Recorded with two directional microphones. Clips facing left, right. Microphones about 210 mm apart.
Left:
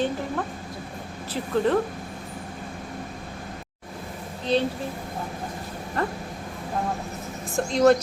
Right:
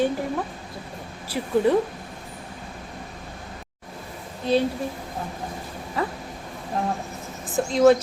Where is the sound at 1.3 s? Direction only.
10° right (ahead or behind).